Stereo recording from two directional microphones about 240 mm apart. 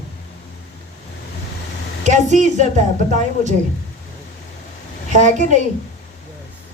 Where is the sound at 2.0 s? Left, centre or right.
Right.